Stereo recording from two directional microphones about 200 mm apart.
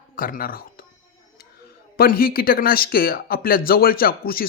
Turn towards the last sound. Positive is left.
turn(degrees=50)  # may be behind; listen again after turning